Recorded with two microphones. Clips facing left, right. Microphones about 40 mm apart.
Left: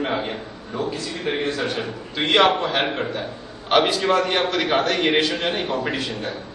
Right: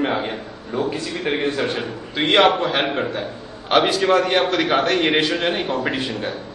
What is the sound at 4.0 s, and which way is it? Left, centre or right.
A man's voice, centre.